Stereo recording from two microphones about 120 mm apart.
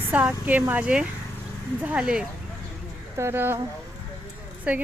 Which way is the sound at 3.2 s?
20° right (ahead or behind).